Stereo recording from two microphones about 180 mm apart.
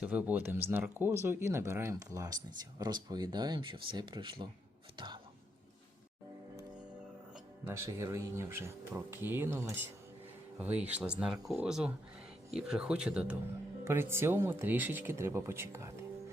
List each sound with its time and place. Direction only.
0.0 s speech: 5° right (ahead or behind); by 4.4 s 25° right (ahead or behind)
4.9 s whispering: 25° right (ahead or behind)
7.7 s speech: 15° right (ahead or behind)